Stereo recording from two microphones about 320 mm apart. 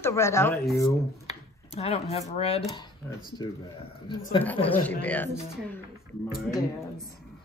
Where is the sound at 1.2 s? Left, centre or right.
Centre.